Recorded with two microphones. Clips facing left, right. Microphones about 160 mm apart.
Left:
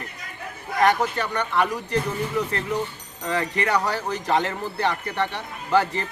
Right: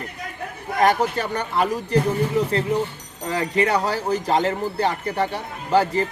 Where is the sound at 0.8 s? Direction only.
30° right (ahead or behind).